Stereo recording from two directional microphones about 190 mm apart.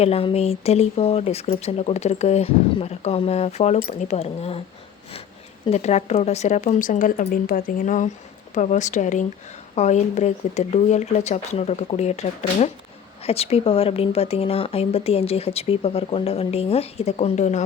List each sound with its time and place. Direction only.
0.0 s speech: 30° left (ahead or behind)
5.6 s speech: 35° left (ahead or behind)